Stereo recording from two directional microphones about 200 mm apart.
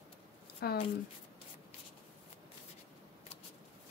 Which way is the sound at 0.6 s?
50° left (ahead or behind).